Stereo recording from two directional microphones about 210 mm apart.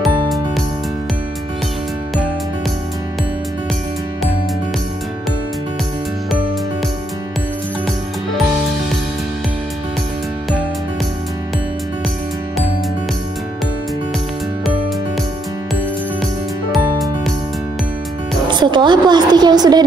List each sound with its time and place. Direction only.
0.0 s music: centre (ahead or behind)
16.7 s music: centre (ahead or behind)
18.5 s a sound: 20° right (ahead or behind)